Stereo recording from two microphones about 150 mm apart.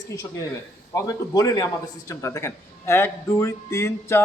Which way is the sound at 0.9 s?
25° left (ahead or behind).